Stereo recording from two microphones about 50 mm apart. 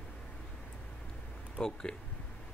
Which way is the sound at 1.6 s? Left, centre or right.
Centre.